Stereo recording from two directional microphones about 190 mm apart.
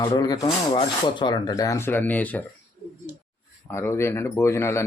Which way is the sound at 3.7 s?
15° left (ahead or behind).